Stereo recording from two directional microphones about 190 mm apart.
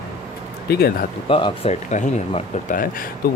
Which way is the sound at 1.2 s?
25° left (ahead or behind).